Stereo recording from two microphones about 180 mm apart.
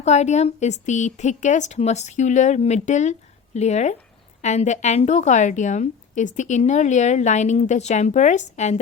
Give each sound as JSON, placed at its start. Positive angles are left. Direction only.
{"t": 0.0, "sound": "a woman's voice", "side_deg": 40}